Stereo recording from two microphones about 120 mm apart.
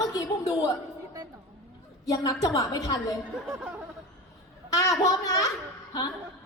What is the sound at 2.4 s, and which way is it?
Speech, 30° left (ahead or behind).